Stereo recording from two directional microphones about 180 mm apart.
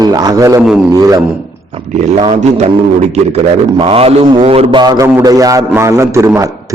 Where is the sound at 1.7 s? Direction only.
35° right (ahead or behind).